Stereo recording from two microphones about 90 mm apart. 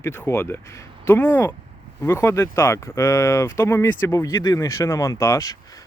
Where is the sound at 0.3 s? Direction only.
25° left (ahead or behind).